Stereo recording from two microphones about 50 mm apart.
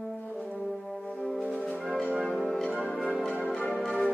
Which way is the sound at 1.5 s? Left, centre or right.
Centre.